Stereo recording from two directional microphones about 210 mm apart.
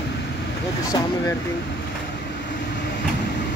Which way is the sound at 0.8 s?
15° left (ahead or behind).